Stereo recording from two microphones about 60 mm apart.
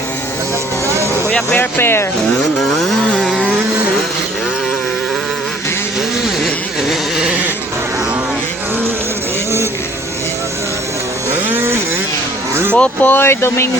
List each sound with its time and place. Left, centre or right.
1.3 s music: centre
1.5 s speech: left
2.4 s chainsaw: centre
11.4 s a sound: right
12.7 s speech: left
13.2 s speech: left